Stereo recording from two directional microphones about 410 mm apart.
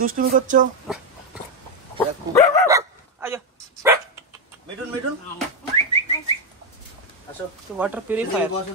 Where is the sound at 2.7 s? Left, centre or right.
Centre.